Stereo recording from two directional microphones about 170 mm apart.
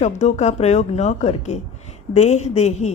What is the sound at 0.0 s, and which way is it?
A woman's voice, 40° left (ahead or behind).